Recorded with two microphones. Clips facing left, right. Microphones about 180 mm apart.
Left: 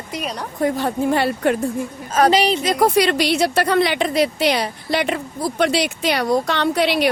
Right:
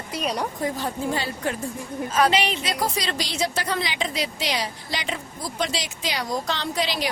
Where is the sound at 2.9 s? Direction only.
65° left (ahead or behind).